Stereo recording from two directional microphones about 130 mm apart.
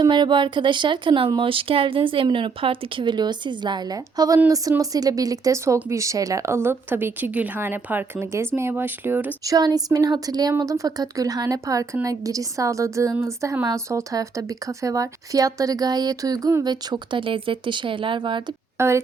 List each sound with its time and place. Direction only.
0.0 s speech: 35° right (ahead or behind); by 9.3 s 15° right (ahead or behind)
9.4 s speech: 30° right (ahead or behind)
16.9 s speech: 40° right (ahead or behind)
18.8 s speech: 20° right (ahead or behind)